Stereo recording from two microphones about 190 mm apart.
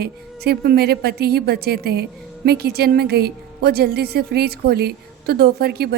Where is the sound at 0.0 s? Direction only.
55° right (ahead or behind).